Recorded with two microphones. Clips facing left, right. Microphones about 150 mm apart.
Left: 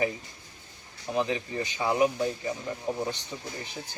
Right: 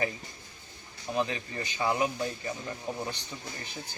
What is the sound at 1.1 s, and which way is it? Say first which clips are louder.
Speech: left 3 dB; 20° left (ahead or behind).